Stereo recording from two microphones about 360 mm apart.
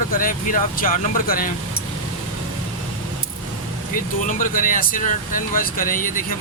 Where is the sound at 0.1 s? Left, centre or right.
Left.